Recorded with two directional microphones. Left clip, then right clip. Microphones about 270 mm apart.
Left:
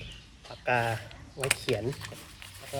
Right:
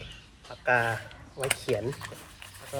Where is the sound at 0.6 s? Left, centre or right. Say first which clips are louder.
Right 3 dB; centre.